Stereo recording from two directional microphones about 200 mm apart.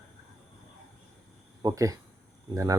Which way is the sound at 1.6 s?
15° right (ahead or behind).